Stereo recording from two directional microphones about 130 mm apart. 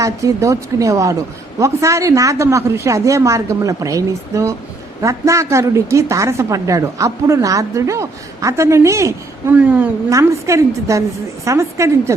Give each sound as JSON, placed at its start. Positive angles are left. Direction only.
{"t": 0.0, "sound": "a woman's voice", "side_deg": -25}
{"t": 10.1, "sound": "a woman's voice", "side_deg": -25}